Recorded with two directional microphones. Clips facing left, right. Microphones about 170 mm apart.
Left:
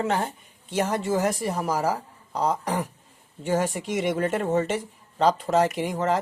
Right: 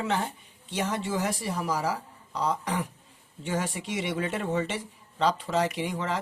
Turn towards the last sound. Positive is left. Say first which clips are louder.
# left 6 dB
turn(degrees=45)  # may be behind; listen again after turning